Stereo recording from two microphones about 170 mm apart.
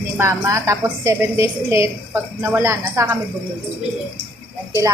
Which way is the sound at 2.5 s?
15° right (ahead or behind).